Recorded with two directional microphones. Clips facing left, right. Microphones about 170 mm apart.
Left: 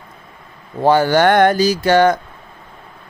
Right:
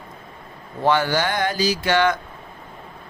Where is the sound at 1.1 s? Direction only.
60° left (ahead or behind); by 2.2 s 40° left (ahead or behind).